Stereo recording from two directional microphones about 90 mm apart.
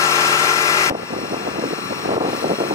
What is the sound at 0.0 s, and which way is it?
Engine, 35° left (ahead or behind).